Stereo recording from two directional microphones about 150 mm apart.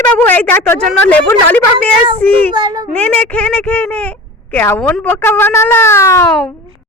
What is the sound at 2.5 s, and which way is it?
Speech, 30° right (ahead or behind).